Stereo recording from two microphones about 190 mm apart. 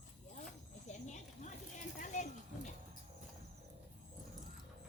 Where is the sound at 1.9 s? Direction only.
40° left (ahead or behind).